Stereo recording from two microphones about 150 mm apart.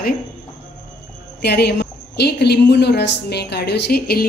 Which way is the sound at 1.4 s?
90° left.